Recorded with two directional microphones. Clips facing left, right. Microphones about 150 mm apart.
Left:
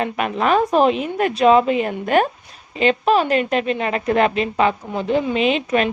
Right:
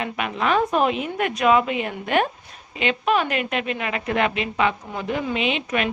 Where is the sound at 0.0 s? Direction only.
40° left (ahead or behind).